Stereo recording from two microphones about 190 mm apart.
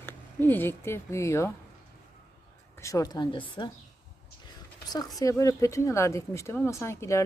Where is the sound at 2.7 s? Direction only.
15° left (ahead or behind).